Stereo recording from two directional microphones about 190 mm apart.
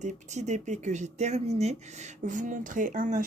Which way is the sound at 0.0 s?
40° right (ahead or behind).